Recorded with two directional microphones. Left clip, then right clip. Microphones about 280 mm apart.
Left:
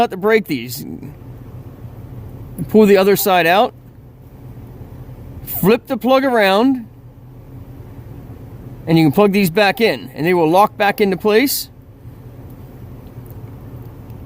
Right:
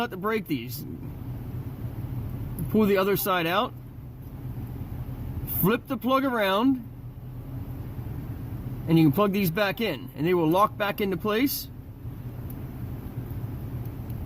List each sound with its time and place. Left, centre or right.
0.0 s speech: left
2.7 s speech: left
5.6 s speech: left
8.9 s speech: left